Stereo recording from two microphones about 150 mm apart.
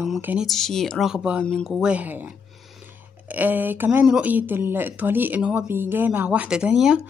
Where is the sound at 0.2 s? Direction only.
10° right (ahead or behind).